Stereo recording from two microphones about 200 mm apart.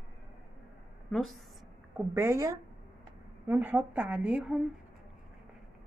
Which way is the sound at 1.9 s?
10° right (ahead or behind).